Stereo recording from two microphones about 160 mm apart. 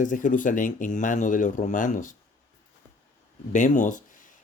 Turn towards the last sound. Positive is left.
turn(degrees=55)  # may be behind; listen again after turning